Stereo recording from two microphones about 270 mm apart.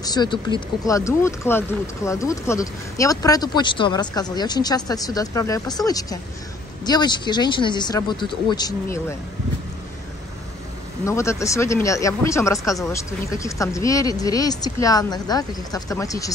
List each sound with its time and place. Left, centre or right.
0.0 s speech: centre
11.1 s speech: centre